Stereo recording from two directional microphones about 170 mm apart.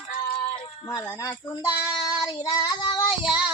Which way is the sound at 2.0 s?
20° left (ahead or behind).